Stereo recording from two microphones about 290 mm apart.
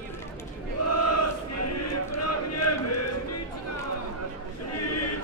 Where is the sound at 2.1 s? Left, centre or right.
Left.